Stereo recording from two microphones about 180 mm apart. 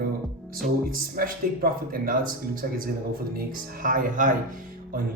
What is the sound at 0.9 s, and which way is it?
Speech, 50° right (ahead or behind).